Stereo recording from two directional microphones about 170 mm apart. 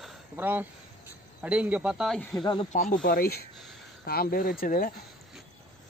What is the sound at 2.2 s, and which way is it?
Speech, 10° left (ahead or behind).